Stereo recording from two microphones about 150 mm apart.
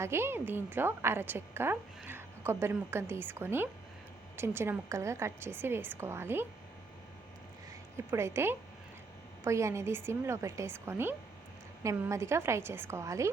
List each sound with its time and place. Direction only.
0.0 s a woman's voice: 15° right (ahead or behind)
7.9 s a woman's voice: 20° right (ahead or behind)